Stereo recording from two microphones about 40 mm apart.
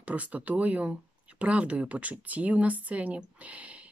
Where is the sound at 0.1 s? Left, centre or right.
Right.